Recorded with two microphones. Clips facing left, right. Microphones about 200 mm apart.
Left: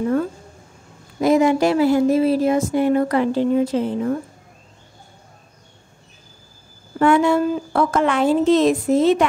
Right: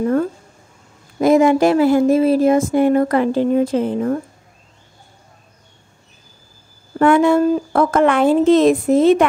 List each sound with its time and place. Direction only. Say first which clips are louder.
1.2 s speech: right 3 dB; 50° right (ahead or behind)
7.0 s speech: right 3 dB; 55° right (ahead or behind)